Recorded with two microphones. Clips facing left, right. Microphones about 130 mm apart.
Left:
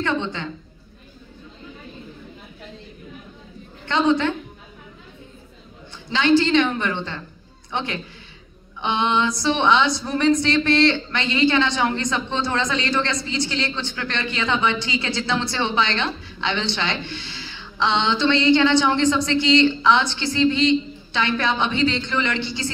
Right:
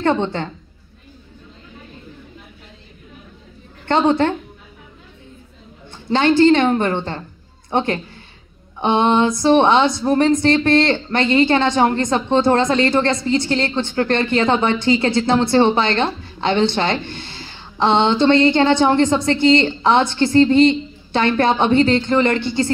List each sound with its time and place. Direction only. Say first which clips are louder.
0.0 s speech: right 6 dB; 50° right (ahead or behind)
3.8 s speech: right 4 dB; 55° right (ahead or behind)
6.0 s speech: right 5 dB; 50° right (ahead or behind)